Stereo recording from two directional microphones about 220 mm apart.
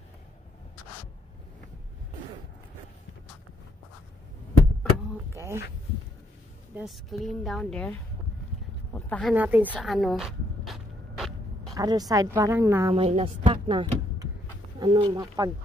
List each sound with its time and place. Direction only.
5.3 s speech: 10° right (ahead or behind)
6.7 s speech: centre (ahead or behind)
9.3 s speech: 10° right (ahead or behind)
9.7 s a sound: centre (ahead or behind)
11.7 s speech: 15° right (ahead or behind)
12.9 s speech: 25° right (ahead or behind)